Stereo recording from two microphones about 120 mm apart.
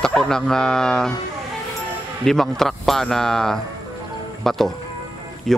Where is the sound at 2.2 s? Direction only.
5° left (ahead or behind).